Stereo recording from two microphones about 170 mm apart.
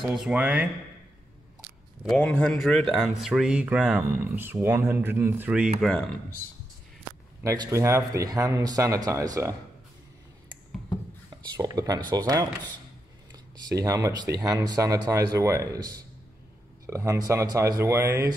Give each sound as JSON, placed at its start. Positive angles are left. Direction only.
{"t": 0.0, "sound": "speech", "side_deg": -5}
{"t": 2.0, "sound": "speech", "side_deg": 5}
{"t": 7.4, "sound": "speech", "side_deg": -20}
{"t": 11.5, "sound": "speech", "side_deg": -20}